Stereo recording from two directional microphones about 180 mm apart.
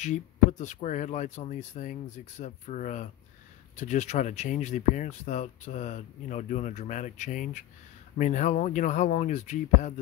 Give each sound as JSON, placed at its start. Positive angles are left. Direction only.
{"t": 0.0, "sound": "speech", "side_deg": 40}